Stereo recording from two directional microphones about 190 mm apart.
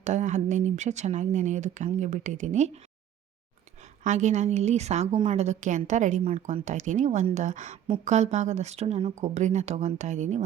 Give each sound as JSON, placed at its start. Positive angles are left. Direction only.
{"t": 0.0, "sound": "a woman's voice", "side_deg": -40}
{"t": 4.0, "sound": "a woman's voice", "side_deg": -40}